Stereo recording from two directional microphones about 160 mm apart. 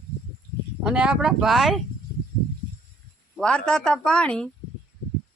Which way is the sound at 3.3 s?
5° left (ahead or behind).